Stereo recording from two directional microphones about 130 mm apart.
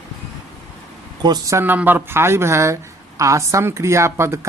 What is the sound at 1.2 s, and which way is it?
Speech, 35° right (ahead or behind).